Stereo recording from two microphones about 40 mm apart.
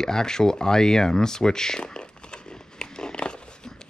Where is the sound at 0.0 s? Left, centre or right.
Centre.